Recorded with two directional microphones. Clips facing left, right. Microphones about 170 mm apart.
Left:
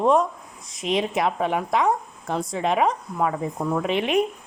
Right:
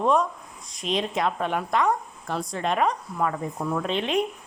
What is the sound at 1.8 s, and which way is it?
Speech, 20° left (ahead or behind).